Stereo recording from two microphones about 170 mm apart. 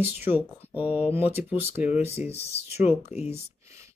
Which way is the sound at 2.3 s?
35° left (ahead or behind).